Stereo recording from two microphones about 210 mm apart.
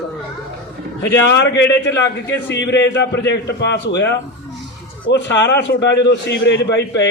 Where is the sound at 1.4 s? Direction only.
55° left (ahead or behind).